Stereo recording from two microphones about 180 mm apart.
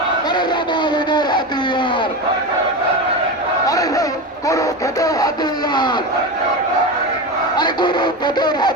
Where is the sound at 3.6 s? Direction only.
20° left (ahead or behind).